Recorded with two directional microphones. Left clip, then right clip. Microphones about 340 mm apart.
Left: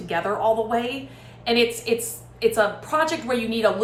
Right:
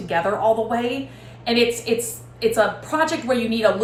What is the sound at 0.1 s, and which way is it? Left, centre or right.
A woman's voice, centre.